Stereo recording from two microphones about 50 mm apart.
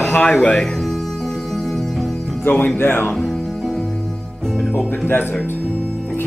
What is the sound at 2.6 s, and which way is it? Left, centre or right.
Speech, left.